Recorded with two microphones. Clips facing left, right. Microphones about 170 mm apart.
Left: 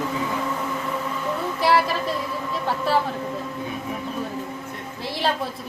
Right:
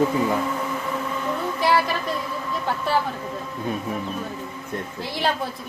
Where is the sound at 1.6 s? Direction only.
Centre (ahead or behind).